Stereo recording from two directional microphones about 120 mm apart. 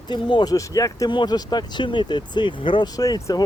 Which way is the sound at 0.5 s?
30° left (ahead or behind).